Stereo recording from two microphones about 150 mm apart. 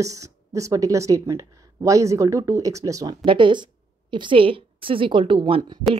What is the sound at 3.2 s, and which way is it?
A woman's voice, 35° right (ahead or behind).